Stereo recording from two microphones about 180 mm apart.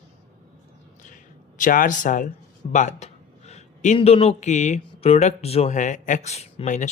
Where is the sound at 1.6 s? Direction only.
50° left (ahead or behind).